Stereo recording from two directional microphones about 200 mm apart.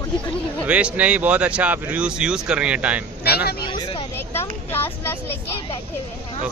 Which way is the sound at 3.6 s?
25° left (ahead or behind).